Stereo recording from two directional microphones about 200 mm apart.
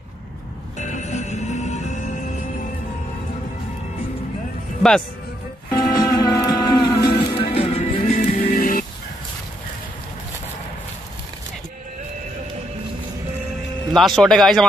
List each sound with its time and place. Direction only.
0.7 s music: 35° left (ahead or behind)
5.7 s music: 20° left (ahead or behind); by 8.8 s 45° left (ahead or behind)
13.9 s speech: centre (ahead or behind)